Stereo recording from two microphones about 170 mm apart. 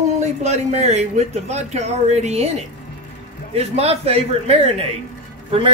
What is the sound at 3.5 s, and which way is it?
A man's voice, 35° right (ahead or behind).